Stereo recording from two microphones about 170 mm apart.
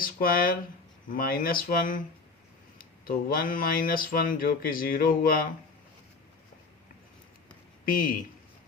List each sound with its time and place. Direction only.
0.0 s speech: 60° left (ahead or behind)
7.9 s speech: 55° left (ahead or behind)